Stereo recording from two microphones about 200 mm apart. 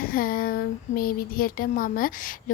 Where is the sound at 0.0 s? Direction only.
45° left (ahead or behind).